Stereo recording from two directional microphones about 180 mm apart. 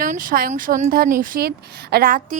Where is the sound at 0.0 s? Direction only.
50° right (ahead or behind).